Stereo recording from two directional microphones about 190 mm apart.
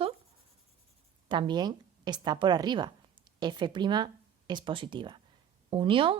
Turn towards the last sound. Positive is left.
turn(degrees=-25)  # may be behind; listen again after turning